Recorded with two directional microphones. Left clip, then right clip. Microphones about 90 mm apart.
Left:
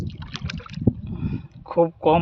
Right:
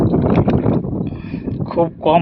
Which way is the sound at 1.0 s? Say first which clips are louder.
Right 9 dB; 30° left (ahead or behind).